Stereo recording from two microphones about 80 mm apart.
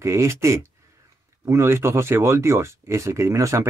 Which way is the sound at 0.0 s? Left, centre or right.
Right.